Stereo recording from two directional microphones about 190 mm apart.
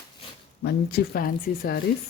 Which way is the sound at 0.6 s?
60° left (ahead or behind).